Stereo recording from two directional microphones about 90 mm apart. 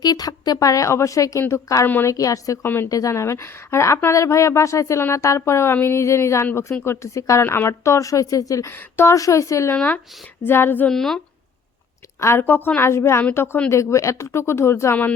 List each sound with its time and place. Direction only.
0.0 s a woman's voice: 50° left (ahead or behind)
2.6 s a woman's voice: 25° left (ahead or behind)
2.9 s a woman's voice: 35° left (ahead or behind)
8.7 s speech: 25° left (ahead or behind)
9.1 s a woman's voice: 35° left (ahead or behind)
9.7 s a woman's voice: 20° left (ahead or behind)
10.8 s speech: 5° left (ahead or behind)
12.2 s a woman's voice: 25° left (ahead or behind)